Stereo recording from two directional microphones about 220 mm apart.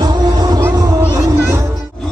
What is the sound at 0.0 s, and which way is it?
Music, 20° right (ahead or behind).